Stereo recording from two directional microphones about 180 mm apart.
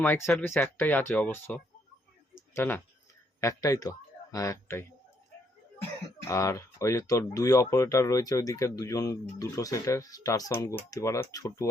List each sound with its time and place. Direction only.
0.0 s speech: 10° left (ahead or behind)
6.2 s speech: 15° left (ahead or behind)